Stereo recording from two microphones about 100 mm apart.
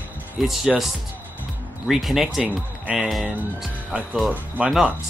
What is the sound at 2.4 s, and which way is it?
Speech, 15° right (ahead or behind).